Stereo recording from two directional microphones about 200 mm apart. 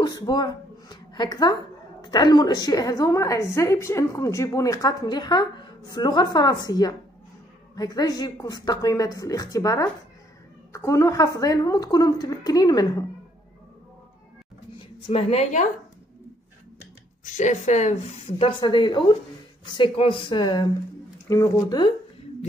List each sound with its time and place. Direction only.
0.0 s a woman's voice: 20° left (ahead or behind)
15.0 s a woman's voice: 30° left (ahead or behind)
17.2 s a woman's voice: 35° left (ahead or behind); by 21.9 s 20° left (ahead or behind)